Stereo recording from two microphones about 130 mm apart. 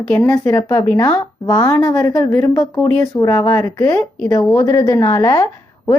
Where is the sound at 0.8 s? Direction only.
15° left (ahead or behind).